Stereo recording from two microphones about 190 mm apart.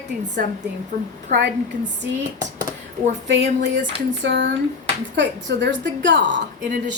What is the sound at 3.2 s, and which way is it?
A woman's voice, 70° right (ahead or behind).